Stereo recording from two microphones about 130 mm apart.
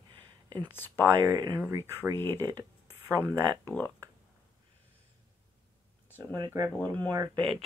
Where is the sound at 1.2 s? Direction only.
30° right (ahead or behind).